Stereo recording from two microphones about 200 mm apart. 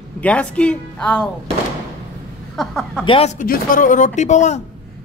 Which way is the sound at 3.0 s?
30° left (ahead or behind).